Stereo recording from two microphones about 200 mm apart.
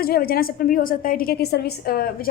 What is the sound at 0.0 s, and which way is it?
A woman's voice, 50° left (ahead or behind).